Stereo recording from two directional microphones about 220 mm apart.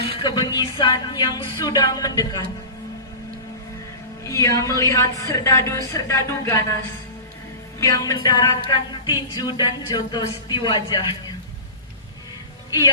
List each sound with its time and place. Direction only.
0.2 s speech: 20° left (ahead or behind)
4.2 s music: 15° left (ahead or behind)
7.8 s music: 15° left (ahead or behind)